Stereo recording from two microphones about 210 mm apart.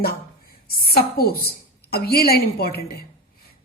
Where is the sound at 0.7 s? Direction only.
45° left (ahead or behind).